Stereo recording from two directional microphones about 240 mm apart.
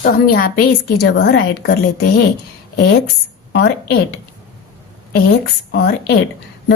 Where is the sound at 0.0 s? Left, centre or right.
Left.